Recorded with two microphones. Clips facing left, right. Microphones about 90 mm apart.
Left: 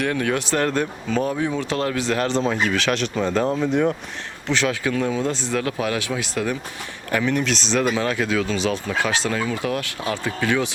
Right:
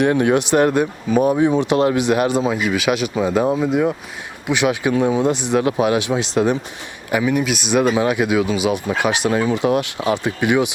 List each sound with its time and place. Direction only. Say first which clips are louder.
0.0 s speech: right 7 dB; 20° right (ahead or behind)
7.1 s speech: right 3 dB; 10° right (ahead or behind)